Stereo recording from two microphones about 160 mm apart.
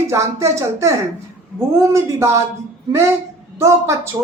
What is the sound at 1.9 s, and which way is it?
Speech, 15° right (ahead or behind).